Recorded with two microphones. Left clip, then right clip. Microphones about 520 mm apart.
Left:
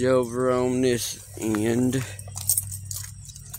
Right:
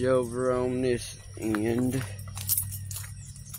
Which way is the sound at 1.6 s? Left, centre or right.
Centre.